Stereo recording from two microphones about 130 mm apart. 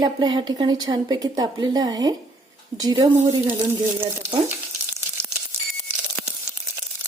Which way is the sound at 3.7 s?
20° right (ahead or behind).